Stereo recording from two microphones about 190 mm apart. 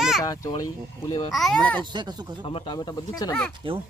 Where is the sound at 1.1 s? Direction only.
35° left (ahead or behind).